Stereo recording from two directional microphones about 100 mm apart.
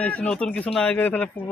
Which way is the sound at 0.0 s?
15° left (ahead or behind).